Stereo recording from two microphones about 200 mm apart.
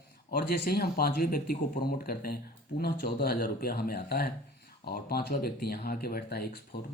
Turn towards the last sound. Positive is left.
turn(degrees=55)  # may be behind; listen again after turning